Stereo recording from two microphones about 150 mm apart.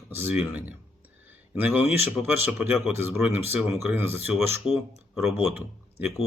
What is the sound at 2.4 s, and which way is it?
Speech, 15° right (ahead or behind).